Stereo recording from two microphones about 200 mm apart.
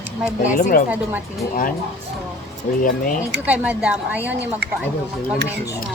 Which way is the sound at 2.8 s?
45° left (ahead or behind).